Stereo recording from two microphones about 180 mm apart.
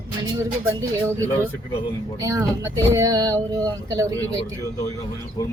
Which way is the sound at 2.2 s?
20° right (ahead or behind).